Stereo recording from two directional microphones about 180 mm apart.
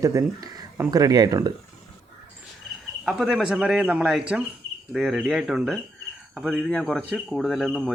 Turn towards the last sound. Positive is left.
turn(degrees=0)  # may be behind; listen again after turning